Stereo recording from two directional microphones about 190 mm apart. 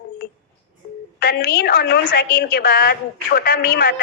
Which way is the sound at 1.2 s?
55° left (ahead or behind).